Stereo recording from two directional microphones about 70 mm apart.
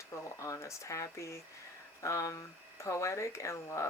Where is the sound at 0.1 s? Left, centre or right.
Left.